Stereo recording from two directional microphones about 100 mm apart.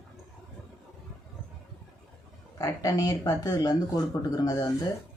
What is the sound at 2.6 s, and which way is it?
Speech, 35° left (ahead or behind).